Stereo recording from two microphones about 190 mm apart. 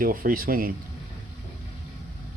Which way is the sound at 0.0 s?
50° right (ahead or behind).